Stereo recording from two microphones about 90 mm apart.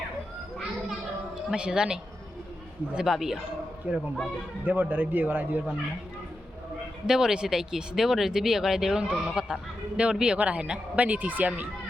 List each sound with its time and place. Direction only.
1.4 s speech: 10° right (ahead or behind)
3.9 s speech: 20° right (ahead or behind)
7.1 s speech: 5° right (ahead or behind)